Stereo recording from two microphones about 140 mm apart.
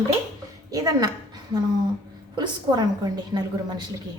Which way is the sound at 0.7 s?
25° right (ahead or behind).